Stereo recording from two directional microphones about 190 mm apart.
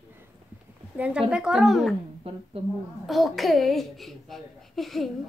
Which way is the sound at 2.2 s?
30° right (ahead or behind).